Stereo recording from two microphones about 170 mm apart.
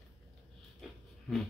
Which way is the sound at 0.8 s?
Centre (ahead or behind).